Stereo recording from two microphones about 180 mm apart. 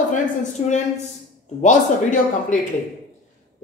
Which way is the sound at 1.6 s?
45° left (ahead or behind).